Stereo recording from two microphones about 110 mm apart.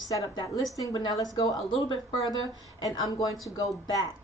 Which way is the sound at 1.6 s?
50° left (ahead or behind).